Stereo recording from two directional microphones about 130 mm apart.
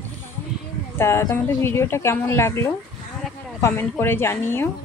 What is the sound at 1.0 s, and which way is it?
A woman's voice, 20° left (ahead or behind).